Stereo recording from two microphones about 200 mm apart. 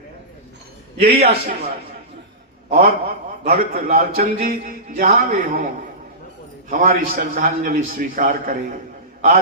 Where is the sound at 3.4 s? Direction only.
50° right (ahead or behind).